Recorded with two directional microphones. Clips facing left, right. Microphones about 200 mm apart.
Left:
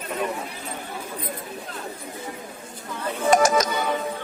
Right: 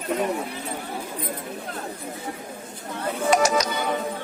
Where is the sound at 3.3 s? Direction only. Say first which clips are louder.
Left 2 dB; 50° left (ahead or behind).